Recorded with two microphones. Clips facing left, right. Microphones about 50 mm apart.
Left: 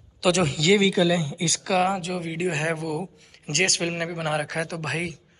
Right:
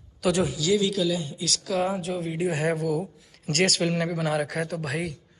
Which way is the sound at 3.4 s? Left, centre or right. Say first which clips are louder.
Right 1 dB; left.